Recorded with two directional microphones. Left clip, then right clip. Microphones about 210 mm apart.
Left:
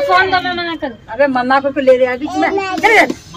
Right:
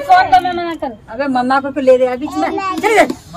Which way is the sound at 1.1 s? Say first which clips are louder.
Left 3 dB; 55° right (ahead or behind).